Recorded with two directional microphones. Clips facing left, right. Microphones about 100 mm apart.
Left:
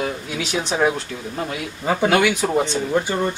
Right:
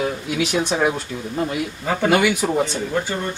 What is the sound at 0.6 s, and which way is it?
Speech, 10° left (ahead or behind).